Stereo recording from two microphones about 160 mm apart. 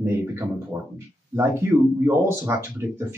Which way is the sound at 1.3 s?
15° right (ahead or behind).